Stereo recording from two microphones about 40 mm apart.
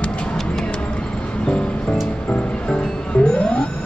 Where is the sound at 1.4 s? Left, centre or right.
Left.